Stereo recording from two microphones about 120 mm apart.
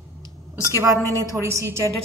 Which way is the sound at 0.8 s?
25° right (ahead or behind).